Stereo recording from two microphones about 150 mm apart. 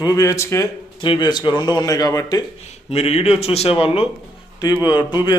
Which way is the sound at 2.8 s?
40° left (ahead or behind).